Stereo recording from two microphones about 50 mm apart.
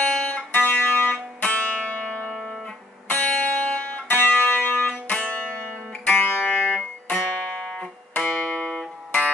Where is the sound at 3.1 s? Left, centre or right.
Left.